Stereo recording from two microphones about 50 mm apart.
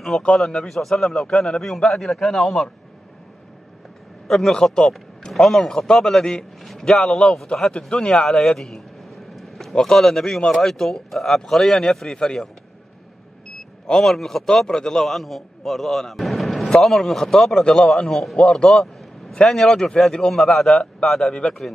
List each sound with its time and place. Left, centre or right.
0.1 s a man's voice: centre
0.5 s a man's voice: centre
4.3 s speech: centre
5.3 s a man's voice: centre
14.0 s a man's voice: centre
17.9 s a man's voice: centre